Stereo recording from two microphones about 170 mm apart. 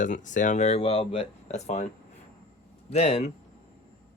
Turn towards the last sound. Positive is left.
turn(degrees=35)  # may be behind; listen again after turning